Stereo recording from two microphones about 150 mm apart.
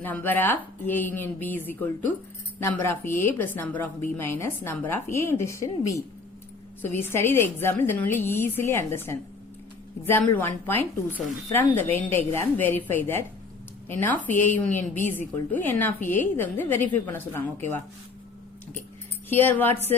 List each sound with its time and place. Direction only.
0.0 s a woman's voice: 10° left (ahead or behind)
19.3 s a woman's voice: 15° left (ahead or behind)